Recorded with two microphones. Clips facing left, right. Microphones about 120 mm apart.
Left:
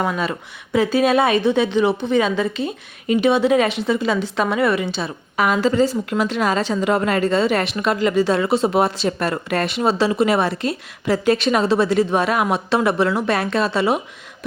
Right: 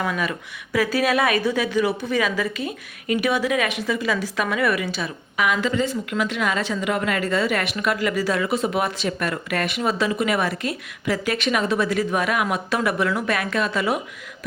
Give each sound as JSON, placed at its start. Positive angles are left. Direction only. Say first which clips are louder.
{"t": 0.0, "sound": "a woman's voice", "louder": "left 3 dB", "side_deg": 30}